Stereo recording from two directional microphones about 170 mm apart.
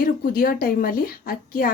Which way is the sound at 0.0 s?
60° left (ahead or behind).